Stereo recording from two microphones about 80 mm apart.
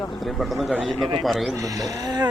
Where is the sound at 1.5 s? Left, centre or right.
Right.